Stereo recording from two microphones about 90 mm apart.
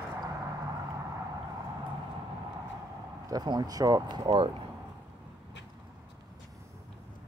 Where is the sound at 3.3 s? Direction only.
50° right (ahead or behind).